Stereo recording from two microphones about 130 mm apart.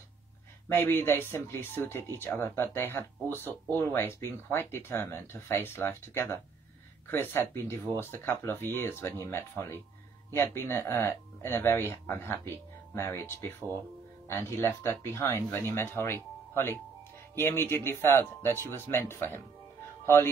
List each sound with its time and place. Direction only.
0.7 s speech: 20° left (ahead or behind)